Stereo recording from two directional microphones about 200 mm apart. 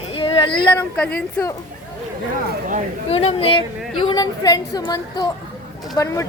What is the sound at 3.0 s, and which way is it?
A woman's voice, 30° left (ahead or behind).